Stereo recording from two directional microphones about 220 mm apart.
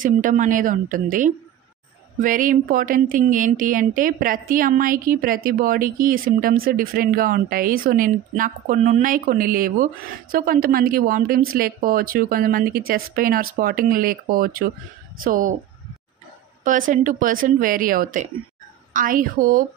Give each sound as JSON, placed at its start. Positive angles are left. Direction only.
{"t": 0.0, "sound": "speech", "side_deg": -35}
{"t": 16.6, "sound": "speech", "side_deg": -35}